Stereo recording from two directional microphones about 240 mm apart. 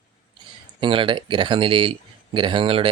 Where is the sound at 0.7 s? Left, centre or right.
Right.